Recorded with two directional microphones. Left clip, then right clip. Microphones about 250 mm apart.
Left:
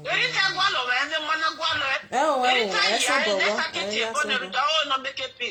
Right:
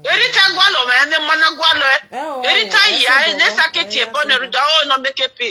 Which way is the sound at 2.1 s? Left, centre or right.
Centre.